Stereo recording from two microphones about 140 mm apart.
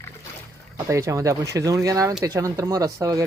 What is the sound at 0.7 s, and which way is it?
Speech, 20° right (ahead or behind).